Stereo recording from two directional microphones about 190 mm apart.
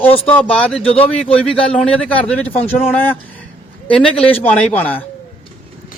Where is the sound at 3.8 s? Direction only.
10° left (ahead or behind).